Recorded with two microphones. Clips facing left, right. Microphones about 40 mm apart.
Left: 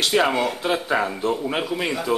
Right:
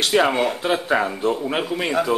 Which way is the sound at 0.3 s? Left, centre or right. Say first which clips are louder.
Right 2 dB; centre.